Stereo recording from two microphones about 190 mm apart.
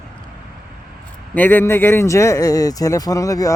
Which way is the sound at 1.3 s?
10° left (ahead or behind).